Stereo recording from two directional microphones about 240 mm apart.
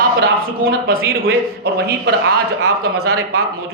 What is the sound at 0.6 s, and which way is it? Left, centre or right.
A man's voice, right.